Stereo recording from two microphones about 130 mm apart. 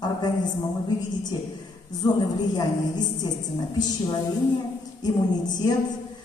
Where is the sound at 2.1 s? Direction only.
30° left (ahead or behind).